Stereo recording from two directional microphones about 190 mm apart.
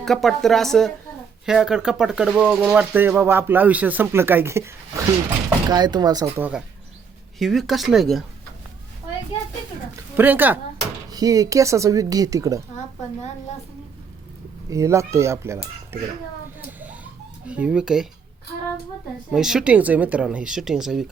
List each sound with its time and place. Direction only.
0.0 s speech: centre (ahead or behind); by 6.5 s 15° right (ahead or behind)
7.3 s speech: centre (ahead or behind)
9.9 s speech: 10° right (ahead or behind)
14.7 s speech: 15° right (ahead or behind)
17.4 s speech: 5° right (ahead or behind)
19.3 s speech: 5° right (ahead or behind)